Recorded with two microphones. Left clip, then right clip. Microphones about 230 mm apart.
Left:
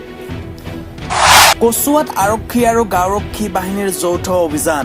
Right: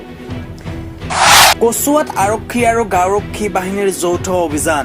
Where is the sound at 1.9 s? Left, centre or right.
Left.